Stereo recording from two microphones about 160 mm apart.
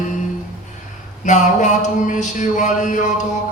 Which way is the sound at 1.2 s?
50° left (ahead or behind).